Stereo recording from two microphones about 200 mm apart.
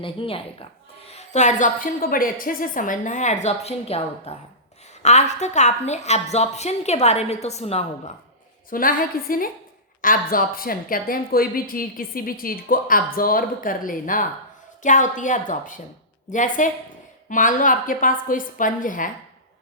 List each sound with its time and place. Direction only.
0.0 s a woman's voice: 25° left (ahead or behind)
8.7 s a woman's voice: 45° left (ahead or behind)